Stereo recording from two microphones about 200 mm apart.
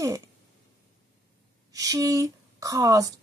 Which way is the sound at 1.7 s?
15° right (ahead or behind).